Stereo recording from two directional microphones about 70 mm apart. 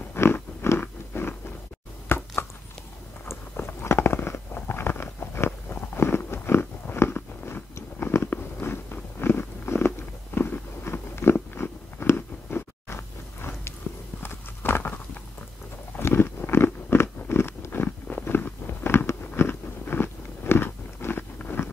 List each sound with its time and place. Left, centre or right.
0.1 s biting: left
2.0 s a sound: left
7.7 s biting: left
13.9 s walk: left
16.0 s biting: left